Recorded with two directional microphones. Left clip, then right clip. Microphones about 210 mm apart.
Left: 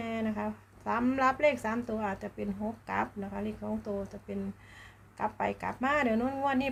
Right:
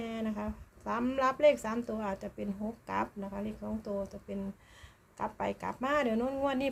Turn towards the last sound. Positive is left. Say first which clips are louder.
# left 1 dB
turn(degrees=-10)  # may be behind; listen again after turning